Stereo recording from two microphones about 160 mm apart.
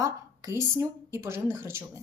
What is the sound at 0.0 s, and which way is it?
Speech, 20° right (ahead or behind).